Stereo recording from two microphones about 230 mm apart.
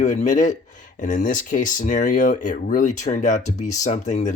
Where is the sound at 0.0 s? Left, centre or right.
Left.